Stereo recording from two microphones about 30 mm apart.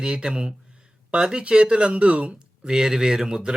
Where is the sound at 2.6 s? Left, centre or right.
Centre.